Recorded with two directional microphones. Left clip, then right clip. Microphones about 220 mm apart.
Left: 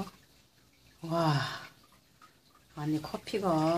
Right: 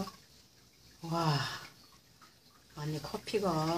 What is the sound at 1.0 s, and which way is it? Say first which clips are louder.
Speech: left 3 dB; 30° left (ahead or behind).